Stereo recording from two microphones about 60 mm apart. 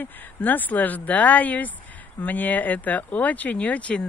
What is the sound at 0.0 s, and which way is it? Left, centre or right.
Speech, left.